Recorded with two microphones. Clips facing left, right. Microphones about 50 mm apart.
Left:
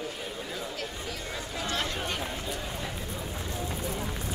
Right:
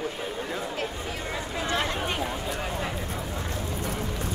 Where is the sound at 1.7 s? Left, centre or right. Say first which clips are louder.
Right 5 dB; centre.